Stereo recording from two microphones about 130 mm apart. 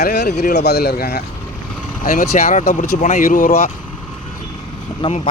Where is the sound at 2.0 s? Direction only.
90° left.